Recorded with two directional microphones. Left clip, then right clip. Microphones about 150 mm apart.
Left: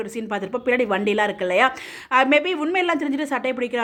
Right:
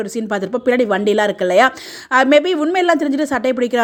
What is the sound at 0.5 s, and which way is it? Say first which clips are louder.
Speech: right 5 dB; 30° right (ahead or behind).